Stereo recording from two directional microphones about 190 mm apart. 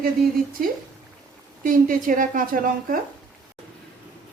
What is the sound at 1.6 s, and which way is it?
A woman's voice, 45° right (ahead or behind).